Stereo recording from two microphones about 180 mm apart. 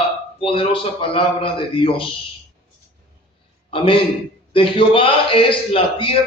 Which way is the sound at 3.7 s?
30° left (ahead or behind).